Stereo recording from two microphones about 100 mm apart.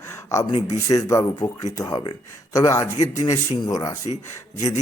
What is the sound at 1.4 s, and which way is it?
Speech, 45° left (ahead or behind).